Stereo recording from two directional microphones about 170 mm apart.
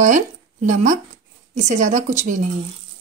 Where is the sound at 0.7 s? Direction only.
45° right (ahead or behind).